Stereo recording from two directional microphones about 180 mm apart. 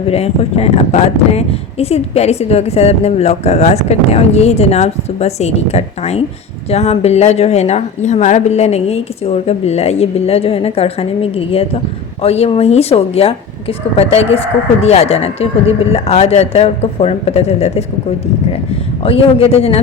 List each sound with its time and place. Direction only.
0.1 s speech: 35° left (ahead or behind)
19.0 s speech: 30° left (ahead or behind)